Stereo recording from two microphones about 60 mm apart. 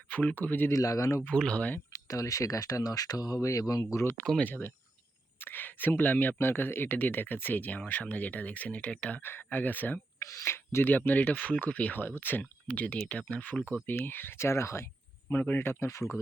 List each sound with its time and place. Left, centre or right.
0.1 s speech: left
0.7 s speech: left
1.3 s speech: centre
1.9 s speech: left
3.9 s speech: left
4.4 s speech: left
9.2 s speech: left
10.4 s speech: left
10.8 s speech: left
12.4 s speech: left
13.8 s speech: left
15.3 s speech: left
15.9 s speech: left